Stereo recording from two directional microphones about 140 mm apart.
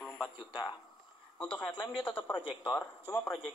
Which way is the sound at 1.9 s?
35° left (ahead or behind).